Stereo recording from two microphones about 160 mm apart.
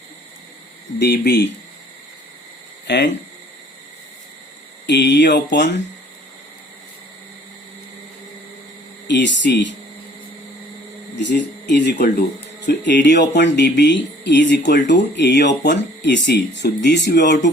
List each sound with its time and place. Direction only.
0.9 s speech: 90° left
2.8 s speech: 90° left
4.9 s speech: 90° left
9.0 s speech: 90° left
11.7 s speech: 90° left